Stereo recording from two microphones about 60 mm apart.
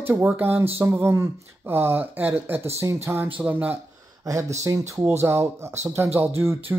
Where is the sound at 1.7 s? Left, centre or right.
Right.